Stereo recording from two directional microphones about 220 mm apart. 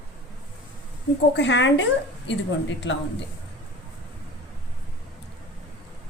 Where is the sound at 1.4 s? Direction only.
55° left (ahead or behind).